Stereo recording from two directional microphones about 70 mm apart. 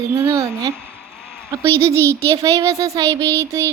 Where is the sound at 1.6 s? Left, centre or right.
Right.